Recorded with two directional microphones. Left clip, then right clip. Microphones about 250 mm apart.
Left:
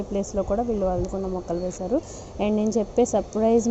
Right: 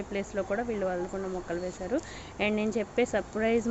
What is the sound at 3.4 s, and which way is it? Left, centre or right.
Speech, centre.